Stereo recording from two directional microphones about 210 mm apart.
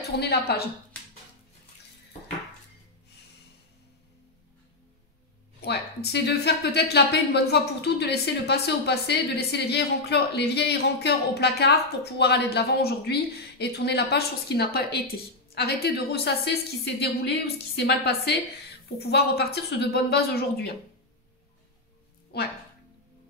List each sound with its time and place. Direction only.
0.2 s a woman's voice: 50° left (ahead or behind)
6.1 s a woman's voice: 50° left (ahead or behind)
22.3 s speech: 50° left (ahead or behind)